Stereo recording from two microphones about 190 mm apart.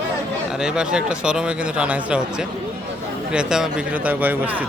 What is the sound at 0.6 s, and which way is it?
Speech, 5° right (ahead or behind).